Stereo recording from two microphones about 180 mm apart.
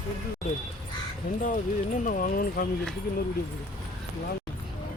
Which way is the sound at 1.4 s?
45° left (ahead or behind).